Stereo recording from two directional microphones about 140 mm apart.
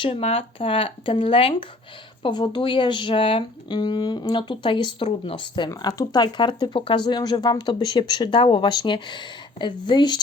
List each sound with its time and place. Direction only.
0.0 s speech: 45° left (ahead or behind)